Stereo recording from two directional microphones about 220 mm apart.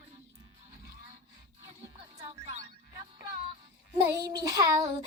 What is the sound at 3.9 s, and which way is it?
Child singing, 15° right (ahead or behind).